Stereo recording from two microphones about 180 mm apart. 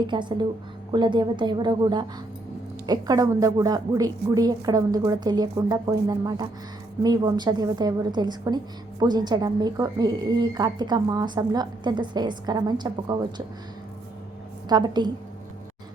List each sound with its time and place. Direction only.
0.1 s a woman's voice: 25° right (ahead or behind)
14.7 s a woman's voice: 25° right (ahead or behind)